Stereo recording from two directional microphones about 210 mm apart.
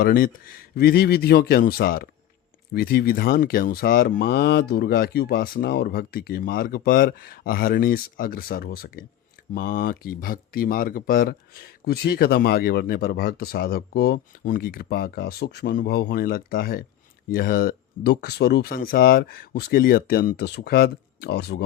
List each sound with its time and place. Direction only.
0.0 s speech: 40° left (ahead or behind)